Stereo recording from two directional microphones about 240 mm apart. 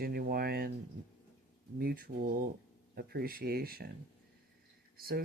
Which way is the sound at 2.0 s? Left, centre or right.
Right.